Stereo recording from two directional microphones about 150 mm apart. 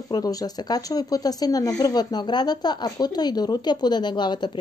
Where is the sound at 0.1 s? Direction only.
25° left (ahead or behind).